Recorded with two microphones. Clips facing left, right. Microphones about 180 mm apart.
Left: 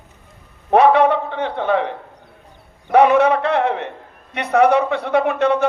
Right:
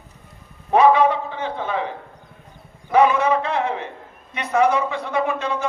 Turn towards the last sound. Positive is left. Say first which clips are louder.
# left 6 dB
turn(degrees=65)  # may be behind; listen again after turning